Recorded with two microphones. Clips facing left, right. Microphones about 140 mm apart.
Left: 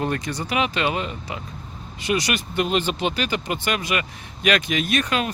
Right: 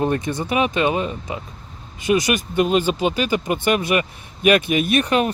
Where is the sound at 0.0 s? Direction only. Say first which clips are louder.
Right 5 dB; 20° right (ahead or behind).